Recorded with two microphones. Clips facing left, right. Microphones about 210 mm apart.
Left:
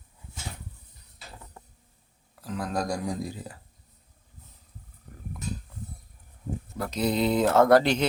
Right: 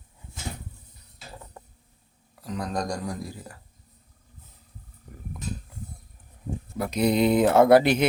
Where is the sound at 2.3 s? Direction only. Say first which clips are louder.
Even; centre (ahead or behind).